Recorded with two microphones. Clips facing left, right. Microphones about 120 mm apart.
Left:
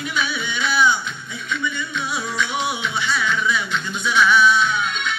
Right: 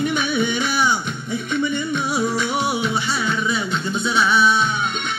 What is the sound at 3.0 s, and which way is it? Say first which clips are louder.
Music: even; 35° right (ahead or behind).